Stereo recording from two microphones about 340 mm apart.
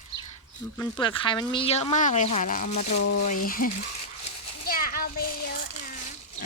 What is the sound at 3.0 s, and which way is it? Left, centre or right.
Speech, left.